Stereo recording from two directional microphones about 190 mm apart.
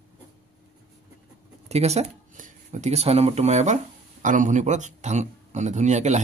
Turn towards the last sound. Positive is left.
turn(degrees=-35)  # may be behind; listen again after turning